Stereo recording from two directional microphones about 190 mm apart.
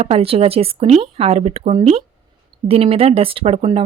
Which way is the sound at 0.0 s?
30° right (ahead or behind).